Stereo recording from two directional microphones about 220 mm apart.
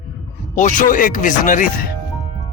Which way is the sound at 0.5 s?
35° left (ahead or behind).